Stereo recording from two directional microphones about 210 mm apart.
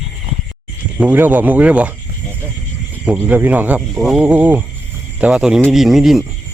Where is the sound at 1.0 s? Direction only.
10° right (ahead or behind).